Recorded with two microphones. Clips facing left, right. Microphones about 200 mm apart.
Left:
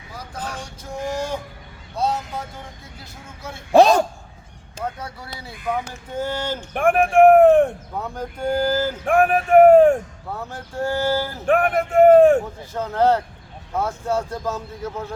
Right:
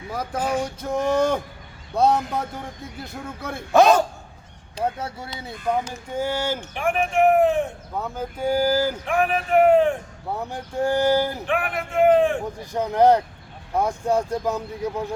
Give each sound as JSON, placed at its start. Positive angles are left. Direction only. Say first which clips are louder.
{"t": 0.6, "sound": "a sound", "louder": "right 6 dB", "side_deg": -60}
{"t": 3.7, "sound": "a man's voice", "louder": "left 2 dB", "side_deg": 30}
{"t": 4.8, "sound": "speech", "louder": "right 4 dB", "side_deg": -25}
{"t": 6.1, "sound": "speech", "louder": "even", "side_deg": -10}
{"t": 6.7, "sound": "speech", "louder": "left 7 dB", "side_deg": 55}
{"t": 7.9, "sound": "speech", "louder": "even", "side_deg": 0}
{"t": 9.0, "sound": "speech", "louder": "left 5 dB", "side_deg": 45}
{"t": 10.3, "sound": "speech", "louder": "right 2 dB", "side_deg": -15}
{"t": 11.4, "sound": "speech", "louder": "left 7 dB", "side_deg": 45}
{"t": 12.7, "sound": "speech", "louder": "right 2 dB", "side_deg": -15}